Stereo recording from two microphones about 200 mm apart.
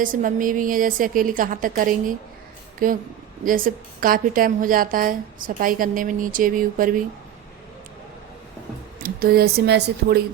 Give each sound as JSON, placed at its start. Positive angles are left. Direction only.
{"t": 0.0, "sound": "a woman's voice", "side_deg": -40}
{"t": 9.0, "sound": "speech", "side_deg": -50}